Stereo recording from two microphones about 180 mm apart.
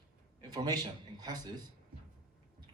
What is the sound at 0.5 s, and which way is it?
Speech, 20° right (ahead or behind).